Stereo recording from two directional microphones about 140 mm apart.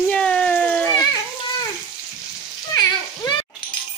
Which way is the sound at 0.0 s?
5° left (ahead or behind).